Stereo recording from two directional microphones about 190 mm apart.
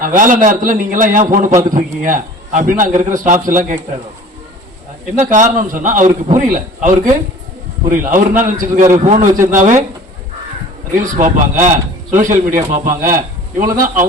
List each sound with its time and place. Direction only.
0.0 s a man's voice: 45° right (ahead or behind)
5.1 s a man's voice: 40° right (ahead or behind)
11.0 s a man's voice: 45° right (ahead or behind)